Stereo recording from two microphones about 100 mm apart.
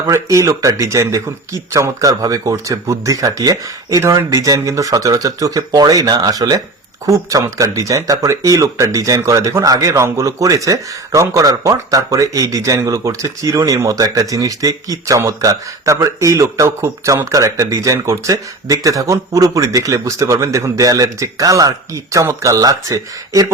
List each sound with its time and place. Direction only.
0.1 s speech: 30° right (ahead or behind)